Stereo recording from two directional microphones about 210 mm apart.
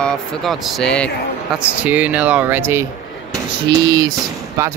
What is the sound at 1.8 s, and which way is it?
Speech, 5° right (ahead or behind).